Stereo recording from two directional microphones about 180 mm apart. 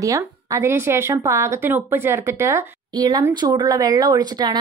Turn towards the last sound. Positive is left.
turn(degrees=-25)  # may be behind; listen again after turning